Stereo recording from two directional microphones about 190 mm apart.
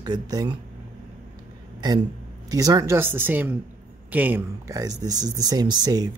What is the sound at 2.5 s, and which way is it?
Speech, 20° right (ahead or behind).